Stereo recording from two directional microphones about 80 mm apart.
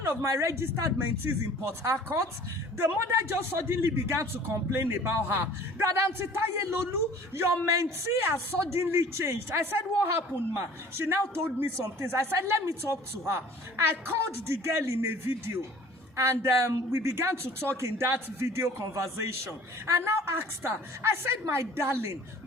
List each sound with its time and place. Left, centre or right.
0.3 s a man's voice: right
7.3 s a man's voice: right